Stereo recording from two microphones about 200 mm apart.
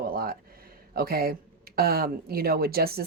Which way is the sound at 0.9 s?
50° right (ahead or behind).